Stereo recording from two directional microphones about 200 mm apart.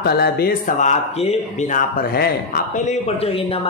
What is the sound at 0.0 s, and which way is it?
A man's voice, 50° left (ahead or behind).